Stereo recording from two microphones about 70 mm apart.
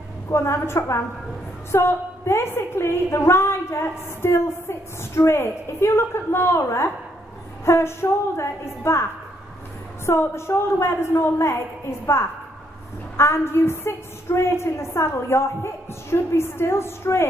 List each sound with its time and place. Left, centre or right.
0.3 s a woman's voice: left
10.0 s a woman's voice: left